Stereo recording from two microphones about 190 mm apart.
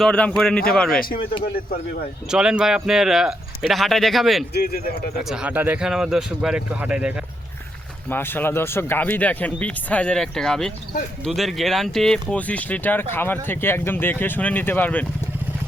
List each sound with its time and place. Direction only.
0.0 s speech: 5° left (ahead or behind)
0.9 s speech: 50° left (ahead or behind)
2.3 s speech: 5° right (ahead or behind)
4.5 s speech: 55° left (ahead or behind)
5.3 s speech: 5° right (ahead or behind)
8.1 s speech: 10° left (ahead or behind)